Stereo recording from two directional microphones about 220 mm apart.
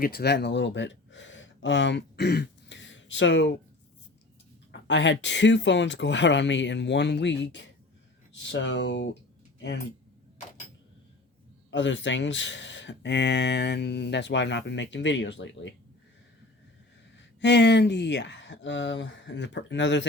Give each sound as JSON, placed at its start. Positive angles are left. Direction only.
{"t": 0.0, "sound": "speech", "side_deg": 45}
{"t": 4.7, "sound": "speech", "side_deg": 55}
{"t": 11.7, "sound": "speech", "side_deg": 55}
{"t": 17.4, "sound": "speech", "side_deg": 50}